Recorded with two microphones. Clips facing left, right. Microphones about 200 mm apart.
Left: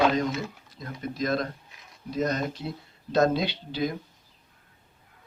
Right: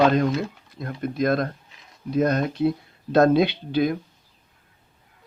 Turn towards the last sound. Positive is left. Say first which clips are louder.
# right 8 dB
turn(degrees=-60)  # may be behind; listen again after turning